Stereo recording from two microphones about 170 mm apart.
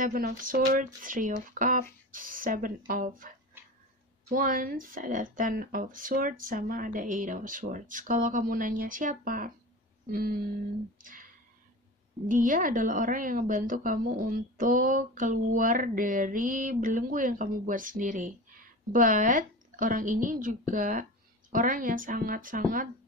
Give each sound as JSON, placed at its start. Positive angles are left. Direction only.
{"t": 0.0, "sound": "a woman's voice", "side_deg": -55}
{"t": 10.0, "sound": "music", "side_deg": -60}
{"t": 11.0, "sound": "clicking", "side_deg": -50}
{"t": 12.3, "sound": "a woman's voice", "side_deg": -50}